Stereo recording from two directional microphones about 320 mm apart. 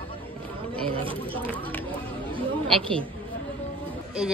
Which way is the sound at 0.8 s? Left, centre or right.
Centre.